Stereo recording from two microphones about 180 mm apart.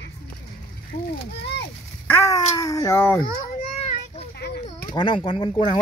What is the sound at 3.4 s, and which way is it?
Children playing, 35° left (ahead or behind).